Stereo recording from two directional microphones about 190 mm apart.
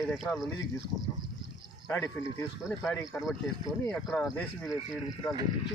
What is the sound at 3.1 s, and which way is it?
A man's voice, 10° left (ahead or behind).